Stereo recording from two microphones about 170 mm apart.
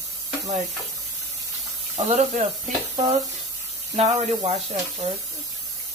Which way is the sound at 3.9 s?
40° right (ahead or behind).